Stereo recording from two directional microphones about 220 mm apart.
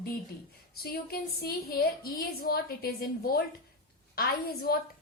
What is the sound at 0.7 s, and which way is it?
A woman's voice, 45° left (ahead or behind).